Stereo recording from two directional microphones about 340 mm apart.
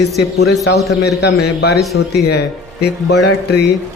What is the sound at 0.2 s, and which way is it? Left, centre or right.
Speech, left.